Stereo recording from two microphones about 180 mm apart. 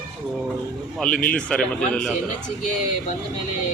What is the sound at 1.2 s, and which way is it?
Speech, 5° left (ahead or behind).